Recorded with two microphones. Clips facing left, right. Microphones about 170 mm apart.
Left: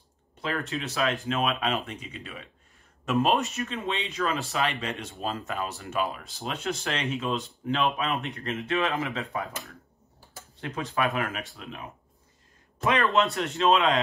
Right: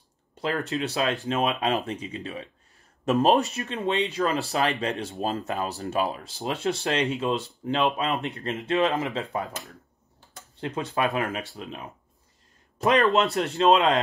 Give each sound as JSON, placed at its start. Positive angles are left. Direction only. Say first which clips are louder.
{"t": 0.4, "sound": "speech", "louder": "right 4 dB", "side_deg": -35}
{"t": 10.6, "sound": "speech", "louder": "right 2 dB", "side_deg": -30}
{"t": 12.7, "sound": "a sound", "louder": "right 4 dB", "side_deg": -30}
{"t": 13.1, "sound": "speech", "louder": "right 2 dB", "side_deg": -35}